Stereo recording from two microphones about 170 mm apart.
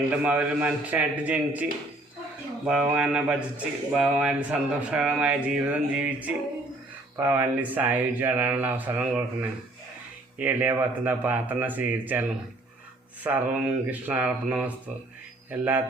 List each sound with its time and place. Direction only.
0.1 s speech: 5° right (ahead or behind)
2.6 s speech: 5° right (ahead or behind)
13.2 s speech: 10° right (ahead or behind)